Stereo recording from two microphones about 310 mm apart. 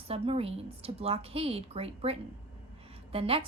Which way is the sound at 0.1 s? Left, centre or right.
Centre.